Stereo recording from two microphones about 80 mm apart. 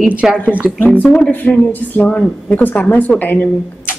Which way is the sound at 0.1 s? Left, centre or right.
Centre.